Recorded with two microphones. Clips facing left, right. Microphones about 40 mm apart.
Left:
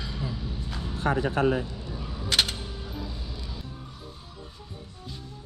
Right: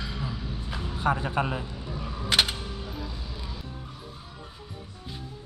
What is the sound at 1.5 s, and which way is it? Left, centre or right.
Camera, centre.